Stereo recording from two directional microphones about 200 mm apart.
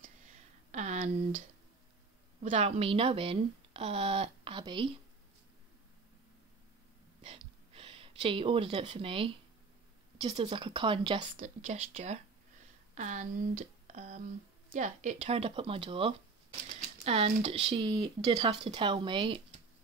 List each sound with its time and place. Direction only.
0.0 s a sound: 35° right (ahead or behind)
2.4 s speech: 35° right (ahead or behind)
7.2 s gasp: 30° right (ahead or behind)
10.2 s speech: 30° right (ahead or behind)
11.3 s speech: 35° right (ahead or behind)